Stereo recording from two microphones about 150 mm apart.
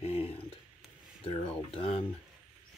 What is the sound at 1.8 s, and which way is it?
Speech, 40° left (ahead or behind).